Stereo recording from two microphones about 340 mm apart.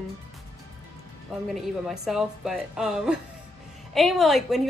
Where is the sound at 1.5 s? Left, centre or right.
Centre.